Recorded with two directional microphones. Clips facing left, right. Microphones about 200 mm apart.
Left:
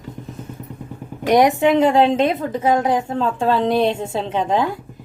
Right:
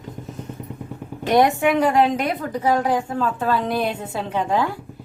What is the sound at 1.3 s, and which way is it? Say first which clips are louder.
A woman's voice: left 3 dB; 15° left (ahead or behind).